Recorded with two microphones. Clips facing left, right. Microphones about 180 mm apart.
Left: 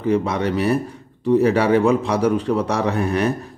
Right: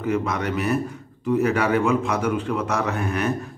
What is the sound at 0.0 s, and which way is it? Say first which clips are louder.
Speech: left 4 dB; 30° left (ahead or behind).